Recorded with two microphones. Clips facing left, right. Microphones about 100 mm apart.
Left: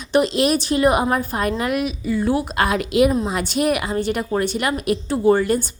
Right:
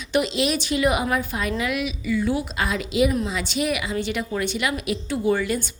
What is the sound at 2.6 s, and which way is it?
A woman's voice, 55° left (ahead or behind).